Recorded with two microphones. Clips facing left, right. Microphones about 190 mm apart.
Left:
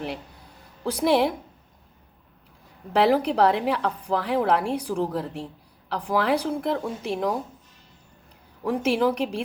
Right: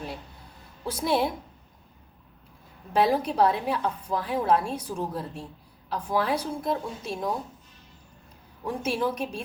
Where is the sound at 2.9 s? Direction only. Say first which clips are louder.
Left 3 dB; 70° left (ahead or behind).